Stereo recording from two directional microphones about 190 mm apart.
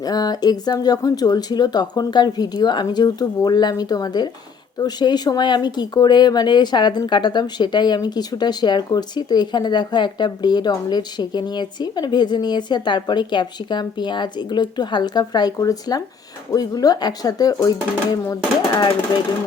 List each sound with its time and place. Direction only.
0.0 s speech: 20° left (ahead or behind)